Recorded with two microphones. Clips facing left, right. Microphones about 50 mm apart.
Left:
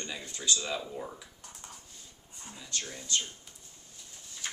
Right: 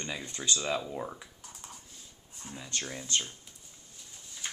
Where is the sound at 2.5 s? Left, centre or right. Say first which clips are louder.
Right 2 dB; right.